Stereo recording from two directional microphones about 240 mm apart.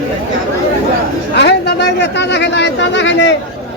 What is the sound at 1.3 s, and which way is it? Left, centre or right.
Chatter, left.